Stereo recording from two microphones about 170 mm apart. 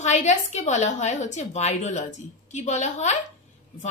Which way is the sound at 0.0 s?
45° left (ahead or behind).